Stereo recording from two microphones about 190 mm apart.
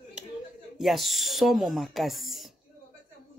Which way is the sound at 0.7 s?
Centre (ahead or behind).